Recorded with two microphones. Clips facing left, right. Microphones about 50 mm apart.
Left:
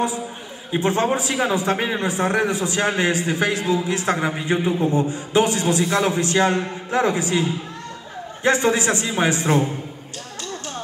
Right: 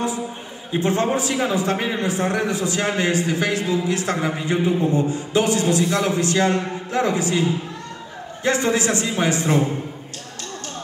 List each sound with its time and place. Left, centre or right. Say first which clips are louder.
0.7 s a man's voice: even; left
8.5 s a man's voice: left 1 dB; left